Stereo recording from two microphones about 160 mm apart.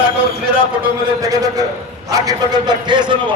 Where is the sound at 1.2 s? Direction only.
20° right (ahead or behind).